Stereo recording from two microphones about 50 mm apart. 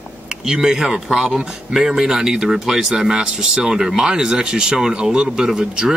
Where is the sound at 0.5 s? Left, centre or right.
Centre.